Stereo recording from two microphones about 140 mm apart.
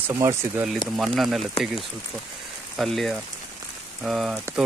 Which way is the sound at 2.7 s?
Centre (ahead or behind).